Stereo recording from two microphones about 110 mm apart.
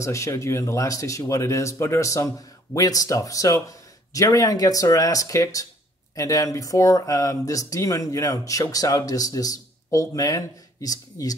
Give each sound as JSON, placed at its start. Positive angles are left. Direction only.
{"t": 0.0, "sound": "speech", "side_deg": 25}